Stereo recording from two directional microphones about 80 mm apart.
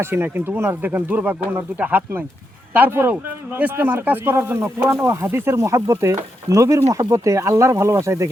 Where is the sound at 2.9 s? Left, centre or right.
Right.